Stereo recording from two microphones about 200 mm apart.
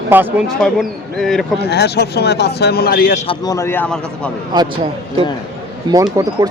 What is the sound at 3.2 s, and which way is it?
Speech, 25° left (ahead or behind).